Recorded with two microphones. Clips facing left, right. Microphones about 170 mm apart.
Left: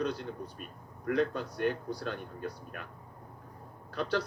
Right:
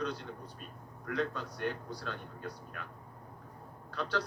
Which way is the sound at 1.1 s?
55° left (ahead or behind).